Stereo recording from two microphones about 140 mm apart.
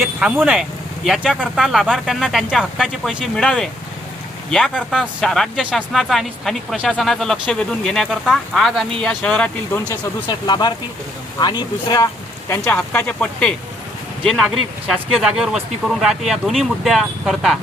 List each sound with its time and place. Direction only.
0.2 s speech: 5° right (ahead or behind)
10.2 s speech: 30° left (ahead or behind)
12.7 s speech: 10° left (ahead or behind)